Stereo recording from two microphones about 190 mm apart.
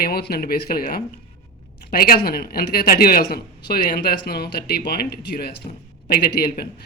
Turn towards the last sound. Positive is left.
turn(degrees=55)  # may be behind; listen again after turning